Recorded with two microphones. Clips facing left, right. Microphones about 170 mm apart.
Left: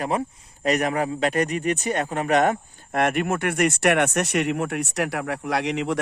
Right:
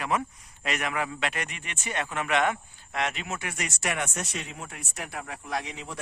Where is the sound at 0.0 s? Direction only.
30° left (ahead or behind).